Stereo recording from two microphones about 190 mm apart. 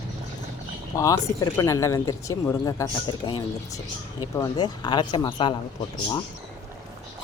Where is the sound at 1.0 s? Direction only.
20° left (ahead or behind).